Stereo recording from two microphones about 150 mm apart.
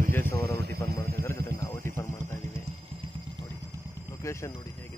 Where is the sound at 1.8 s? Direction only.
15° left (ahead or behind).